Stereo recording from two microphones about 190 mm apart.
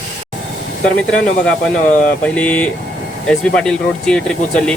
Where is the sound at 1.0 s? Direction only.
5° left (ahead or behind).